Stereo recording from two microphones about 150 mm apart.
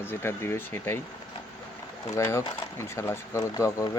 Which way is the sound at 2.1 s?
20° left (ahead or behind).